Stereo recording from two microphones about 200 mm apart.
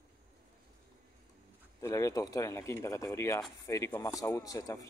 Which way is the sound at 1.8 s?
15° left (ahead or behind).